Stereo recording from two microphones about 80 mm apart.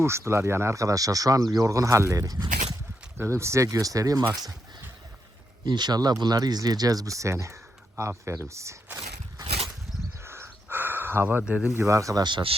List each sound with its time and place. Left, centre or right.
0.0 s speech: right
3.2 s speech: right
5.6 s speech: right
10.2 s a sound: right
11.4 s speech: centre
11.8 s speech: right
12.2 s speech: right